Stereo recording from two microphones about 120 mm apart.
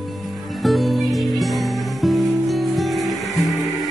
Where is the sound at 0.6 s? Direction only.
Centre (ahead or behind).